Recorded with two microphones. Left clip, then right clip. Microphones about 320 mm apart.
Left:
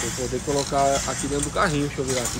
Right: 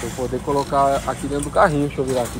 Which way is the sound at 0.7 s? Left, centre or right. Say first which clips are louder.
Right 3 dB; centre.